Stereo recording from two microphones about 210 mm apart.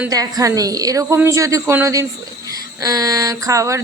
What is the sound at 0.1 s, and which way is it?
A woman's voice, 15° right (ahead or behind).